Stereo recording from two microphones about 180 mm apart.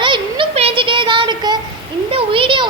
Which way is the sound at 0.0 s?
25° right (ahead or behind).